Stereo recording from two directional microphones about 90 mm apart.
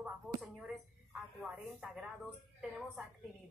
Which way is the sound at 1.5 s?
5° right (ahead or behind).